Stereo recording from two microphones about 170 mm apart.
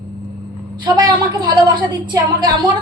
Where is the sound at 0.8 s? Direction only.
25° right (ahead or behind).